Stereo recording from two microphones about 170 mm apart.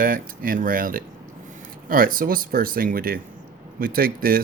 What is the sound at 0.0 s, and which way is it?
Speech, 55° right (ahead or behind).